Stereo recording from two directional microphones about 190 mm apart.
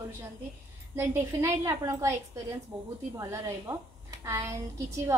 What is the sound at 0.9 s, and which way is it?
A woman's voice, 15° right (ahead or behind).